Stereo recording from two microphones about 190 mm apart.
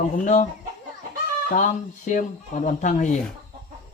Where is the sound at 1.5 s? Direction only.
40° left (ahead or behind).